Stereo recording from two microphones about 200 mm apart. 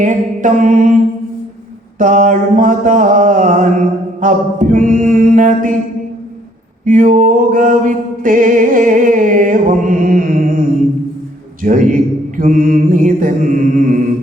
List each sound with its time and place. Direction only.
0.0 s mantra: 40° right (ahead or behind)
2.0 s mantra: 40° right (ahead or behind)
6.8 s mantra: 40° right (ahead or behind)
11.6 s a man's voice: 40° right (ahead or behind)
12.4 s mantra: 40° right (ahead or behind)